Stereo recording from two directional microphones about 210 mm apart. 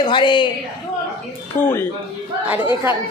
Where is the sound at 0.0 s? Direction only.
20° left (ahead or behind).